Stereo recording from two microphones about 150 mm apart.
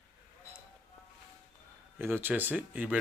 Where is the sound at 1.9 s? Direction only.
15° right (ahead or behind).